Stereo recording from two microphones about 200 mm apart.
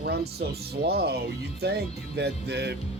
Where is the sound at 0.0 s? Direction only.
55° right (ahead or behind).